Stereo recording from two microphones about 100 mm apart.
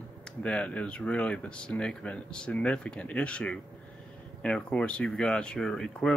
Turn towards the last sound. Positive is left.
turn(degrees=5)  # may be behind; listen again after turning